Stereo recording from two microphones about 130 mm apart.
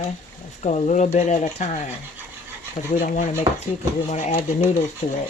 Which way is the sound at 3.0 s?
80° left.